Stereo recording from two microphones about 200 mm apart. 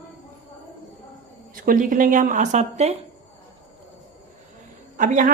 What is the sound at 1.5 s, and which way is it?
Speech, 45° right (ahead or behind).